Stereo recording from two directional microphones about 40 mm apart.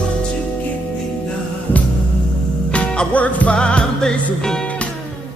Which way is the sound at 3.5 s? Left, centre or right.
Left.